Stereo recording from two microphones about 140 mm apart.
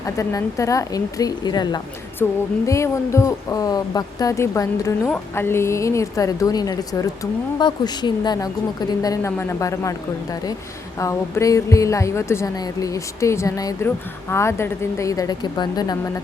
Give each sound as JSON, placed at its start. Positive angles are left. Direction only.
{"t": 0.2, "sound": "speech", "side_deg": 20}
{"t": 2.2, "sound": "a sound", "side_deg": 15}
{"t": 2.6, "sound": "speech", "side_deg": 20}
{"t": 10.9, "sound": "speech", "side_deg": 20}